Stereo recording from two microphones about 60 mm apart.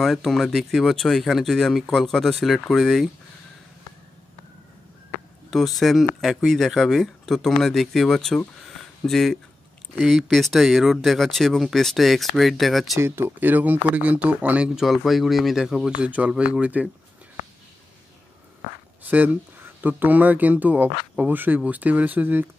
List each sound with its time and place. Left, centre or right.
0.0 s speech: centre
5.5 s speech: centre
8.6 s a sound: centre
9.9 s speech: centre
12.9 s speech: right
13.4 s speech: right
14.8 s speech: centre
15.9 s speech: right
19.0 s speech: right